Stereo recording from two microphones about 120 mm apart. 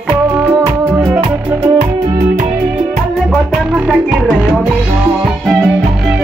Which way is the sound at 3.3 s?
5° right (ahead or behind).